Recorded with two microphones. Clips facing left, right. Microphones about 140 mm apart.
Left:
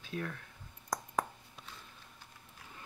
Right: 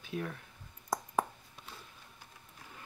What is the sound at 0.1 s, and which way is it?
Speech, 20° right (ahead or behind).